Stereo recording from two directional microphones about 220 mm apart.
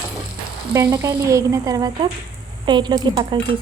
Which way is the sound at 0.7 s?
10° right (ahead or behind).